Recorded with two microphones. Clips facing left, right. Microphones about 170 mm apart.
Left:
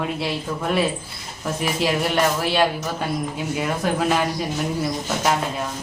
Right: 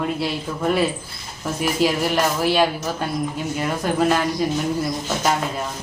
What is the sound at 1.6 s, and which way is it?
Speech, centre (ahead or behind).